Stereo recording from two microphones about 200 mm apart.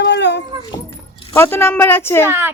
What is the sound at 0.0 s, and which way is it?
Dog, 60° left (ahead or behind).